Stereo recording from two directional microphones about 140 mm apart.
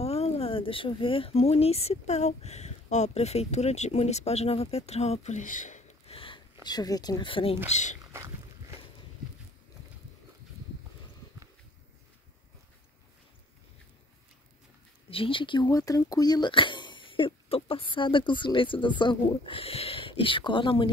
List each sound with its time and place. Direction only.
0.0 s speech: 45° left (ahead or behind)
6.1 s a sound: 40° left (ahead or behind)
6.6 s speech: 30° left (ahead or behind)
7.7 s speech: 60° left (ahead or behind)
8.1 s boat: 20° right (ahead or behind)
15.0 s speech: 40° left (ahead or behind)